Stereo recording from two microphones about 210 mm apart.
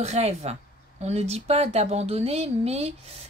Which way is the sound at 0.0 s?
30° right (ahead or behind).